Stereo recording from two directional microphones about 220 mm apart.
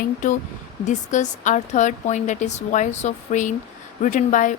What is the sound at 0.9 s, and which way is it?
Speech, 35° left (ahead or behind).